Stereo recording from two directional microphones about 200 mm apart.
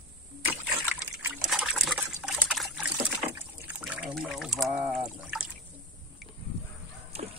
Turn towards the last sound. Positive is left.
turn(degrees=-30)  # may be behind; listen again after turning